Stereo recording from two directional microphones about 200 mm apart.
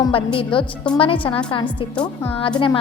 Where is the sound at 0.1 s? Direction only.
25° left (ahead or behind).